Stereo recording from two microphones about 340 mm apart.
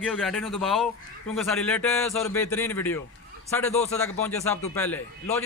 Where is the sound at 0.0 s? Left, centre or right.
Centre.